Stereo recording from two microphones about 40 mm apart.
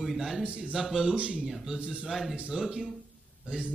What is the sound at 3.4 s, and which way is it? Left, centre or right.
Speech, right.